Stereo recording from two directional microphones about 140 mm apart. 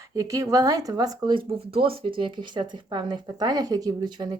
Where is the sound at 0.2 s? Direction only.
25° right (ahead or behind).